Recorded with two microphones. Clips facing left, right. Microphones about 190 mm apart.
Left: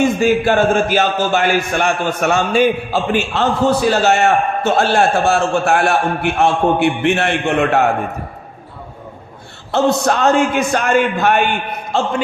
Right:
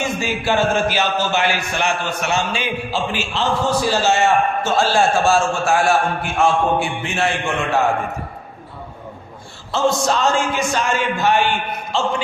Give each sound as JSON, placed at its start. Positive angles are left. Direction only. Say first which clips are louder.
{"t": 0.0, "sound": "speech", "louder": "left 9 dB", "side_deg": 50}
{"t": 9.7, "sound": "speech", "louder": "left 3 dB", "side_deg": 60}